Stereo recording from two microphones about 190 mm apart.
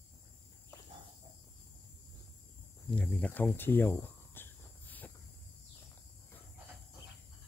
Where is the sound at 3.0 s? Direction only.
5° left (ahead or behind).